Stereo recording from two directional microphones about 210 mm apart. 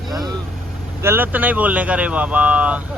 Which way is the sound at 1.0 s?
10° right (ahead or behind).